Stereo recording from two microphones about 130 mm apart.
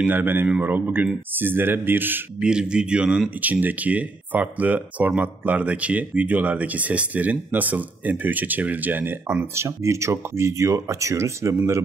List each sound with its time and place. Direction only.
0.0 s speech: 15° right (ahead or behind)